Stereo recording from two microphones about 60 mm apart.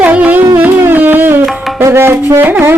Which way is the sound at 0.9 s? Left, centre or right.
Right.